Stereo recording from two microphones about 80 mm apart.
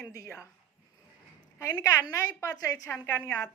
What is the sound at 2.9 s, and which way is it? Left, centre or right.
Speech, left.